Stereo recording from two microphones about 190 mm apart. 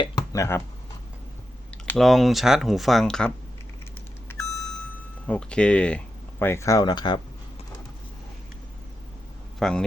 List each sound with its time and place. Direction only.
0.0 s speech: 15° left (ahead or behind)
1.9 s speech: centre (ahead or behind)
4.3 s vehicle: 5° left (ahead or behind)
5.2 s speech: 5° left (ahead or behind); by 7.2 s 20° left (ahead or behind)
9.6 s speech: 5° left (ahead or behind)